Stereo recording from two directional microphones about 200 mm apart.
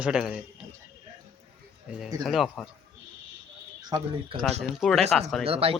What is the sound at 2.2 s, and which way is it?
Speech, centre (ahead or behind).